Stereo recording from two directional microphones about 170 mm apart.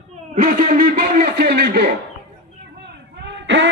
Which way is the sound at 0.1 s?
45° right (ahead or behind).